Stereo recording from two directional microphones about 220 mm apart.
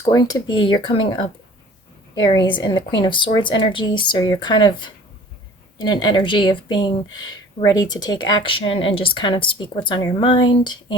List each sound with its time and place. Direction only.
0.0 s speech: 15° left (ahead or behind)
5.7 s speech: 20° left (ahead or behind)